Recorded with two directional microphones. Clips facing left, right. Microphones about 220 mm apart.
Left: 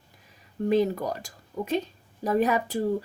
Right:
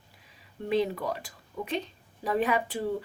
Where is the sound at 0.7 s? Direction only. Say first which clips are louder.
Left 4 dB; 45° left (ahead or behind).